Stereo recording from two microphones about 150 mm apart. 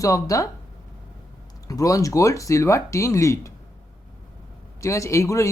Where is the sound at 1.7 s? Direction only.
20° left (ahead or behind).